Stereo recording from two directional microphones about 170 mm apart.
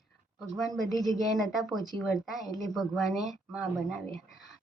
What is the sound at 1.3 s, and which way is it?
Speech, centre (ahead or behind).